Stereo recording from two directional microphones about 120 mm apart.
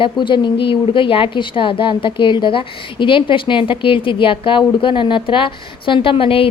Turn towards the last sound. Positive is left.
turn(degrees=50)  # may be behind; listen again after turning